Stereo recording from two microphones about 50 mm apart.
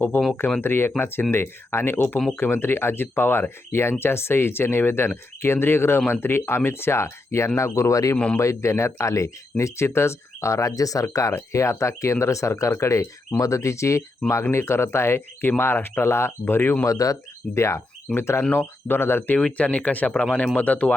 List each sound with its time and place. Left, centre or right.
0.1 s speech: left
8.4 s speech: left
12.2 s speech: left
14.5 s speech: left
16.8 s speech: left
18.1 s speech: left
18.5 s speech: left
19.5 s speech: left